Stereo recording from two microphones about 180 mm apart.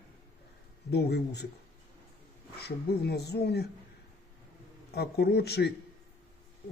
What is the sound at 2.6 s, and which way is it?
Speech, 65° left (ahead or behind).